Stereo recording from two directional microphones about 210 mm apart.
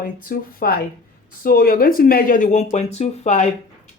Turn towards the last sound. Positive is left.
turn(degrees=35)  # may be behind; listen again after turning